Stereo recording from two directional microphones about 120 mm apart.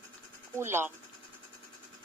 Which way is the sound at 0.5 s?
20° right (ahead or behind).